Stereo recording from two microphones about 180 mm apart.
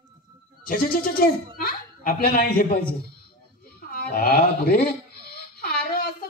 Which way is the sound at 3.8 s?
50° left (ahead or behind).